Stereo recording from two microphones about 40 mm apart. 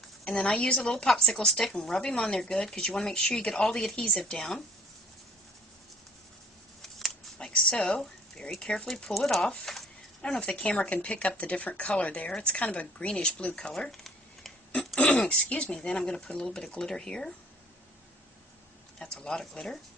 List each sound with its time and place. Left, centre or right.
0.3 s speech: left
7.3 s speech: left
9.7 s a sound: centre
10.4 s speech: left
13.9 s a sound: centre
14.9 s speech: left
18.9 s speech: left